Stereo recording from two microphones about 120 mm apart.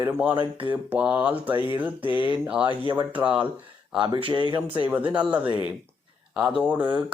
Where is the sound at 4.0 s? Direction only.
40° right (ahead or behind).